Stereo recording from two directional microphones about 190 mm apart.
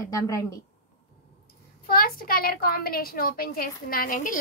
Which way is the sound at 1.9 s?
50° left (ahead or behind).